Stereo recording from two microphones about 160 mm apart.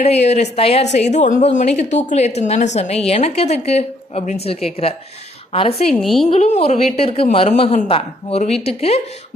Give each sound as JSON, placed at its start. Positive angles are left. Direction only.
{"t": 0.0, "sound": "a woman's voice", "side_deg": 40}
{"t": 5.9, "sound": "a woman's voice", "side_deg": 0}
{"t": 6.2, "sound": "a woman's voice", "side_deg": 45}